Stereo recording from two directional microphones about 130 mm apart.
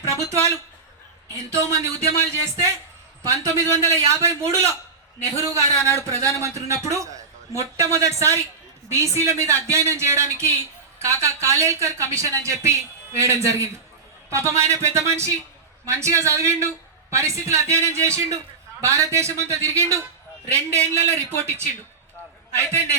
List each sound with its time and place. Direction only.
0.0 s a man's voice: 20° right (ahead or behind)